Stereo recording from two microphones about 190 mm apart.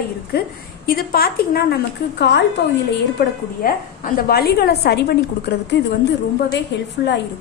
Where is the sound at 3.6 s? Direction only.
50° left (ahead or behind).